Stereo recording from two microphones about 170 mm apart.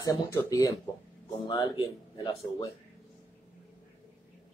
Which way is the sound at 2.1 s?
25° left (ahead or behind).